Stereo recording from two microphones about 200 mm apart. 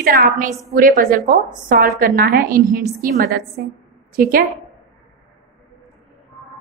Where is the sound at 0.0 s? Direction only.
45° right (ahead or behind).